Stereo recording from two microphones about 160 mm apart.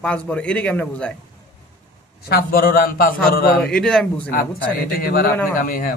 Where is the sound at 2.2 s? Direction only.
70° left (ahead or behind).